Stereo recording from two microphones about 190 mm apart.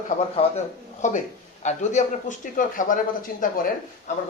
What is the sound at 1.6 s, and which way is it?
Speech, 40° left (ahead or behind).